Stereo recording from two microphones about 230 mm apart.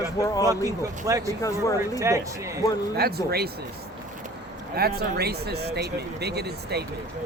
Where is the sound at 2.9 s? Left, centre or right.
Right.